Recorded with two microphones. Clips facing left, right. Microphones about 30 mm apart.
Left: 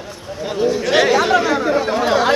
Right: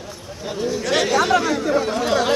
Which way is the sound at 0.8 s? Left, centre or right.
Centre.